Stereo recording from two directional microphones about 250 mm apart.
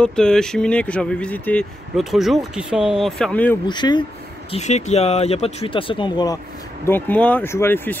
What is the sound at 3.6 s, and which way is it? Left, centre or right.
Speech, centre.